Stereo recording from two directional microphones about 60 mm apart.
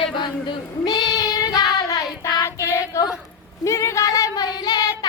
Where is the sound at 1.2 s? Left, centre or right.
Left.